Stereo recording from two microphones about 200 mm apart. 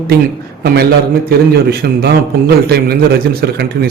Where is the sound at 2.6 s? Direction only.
50° right (ahead or behind).